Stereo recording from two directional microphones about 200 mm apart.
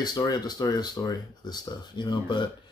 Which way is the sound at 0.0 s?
20° left (ahead or behind).